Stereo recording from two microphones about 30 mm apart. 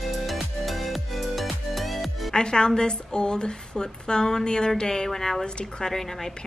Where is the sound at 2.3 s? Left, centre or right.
Left.